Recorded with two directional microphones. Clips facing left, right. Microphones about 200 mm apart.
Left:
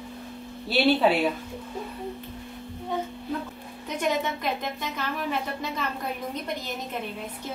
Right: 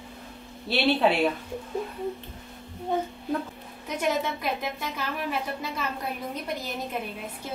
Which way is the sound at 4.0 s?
10° right (ahead or behind).